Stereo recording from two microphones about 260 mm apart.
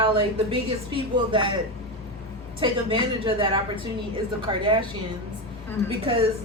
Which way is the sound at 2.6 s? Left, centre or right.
Right.